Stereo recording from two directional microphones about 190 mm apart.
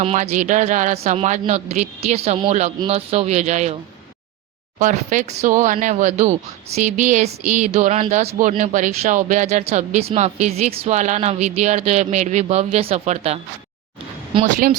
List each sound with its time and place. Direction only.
0.0 s speech: 35° right (ahead or behind)
4.8 s speech: 40° right (ahead or behind)
14.4 s speech: 40° right (ahead or behind)